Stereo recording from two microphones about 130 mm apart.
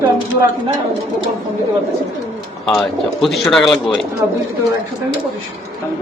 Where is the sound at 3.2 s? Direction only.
Centre (ahead or behind).